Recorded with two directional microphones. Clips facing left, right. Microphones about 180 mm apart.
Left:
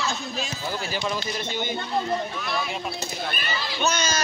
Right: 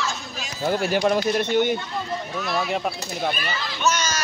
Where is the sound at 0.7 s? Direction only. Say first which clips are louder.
Right 10 dB; 60° right (ahead or behind).